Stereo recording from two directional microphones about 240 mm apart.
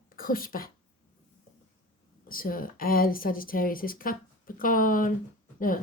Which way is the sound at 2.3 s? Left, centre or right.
Left.